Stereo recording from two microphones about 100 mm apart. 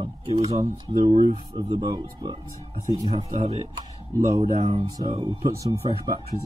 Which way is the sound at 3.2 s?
90° right.